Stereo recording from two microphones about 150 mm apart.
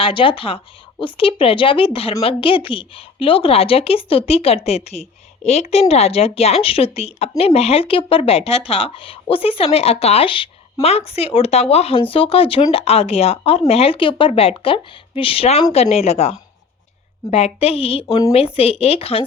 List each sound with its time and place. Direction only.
0.0 s speech: 35° left (ahead or behind)
17.3 s speech: 45° left (ahead or behind)